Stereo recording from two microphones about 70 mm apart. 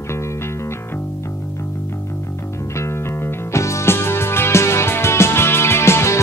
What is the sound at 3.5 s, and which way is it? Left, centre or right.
Music, left.